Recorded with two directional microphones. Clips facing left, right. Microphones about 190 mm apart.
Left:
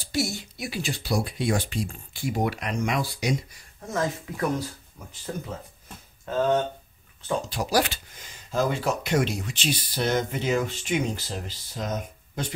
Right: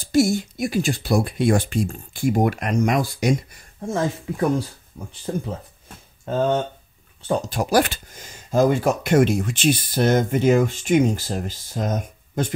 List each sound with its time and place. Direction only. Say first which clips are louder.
0.0 s speech: right 10 dB; 50° right (ahead or behind)
3.8 s speech: right 4 dB; 30° right (ahead or behind); by 12.5 s 50° right (ahead or behind)